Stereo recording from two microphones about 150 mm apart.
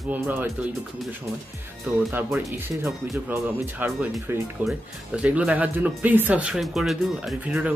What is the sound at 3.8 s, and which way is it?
Speech, 10° right (ahead or behind).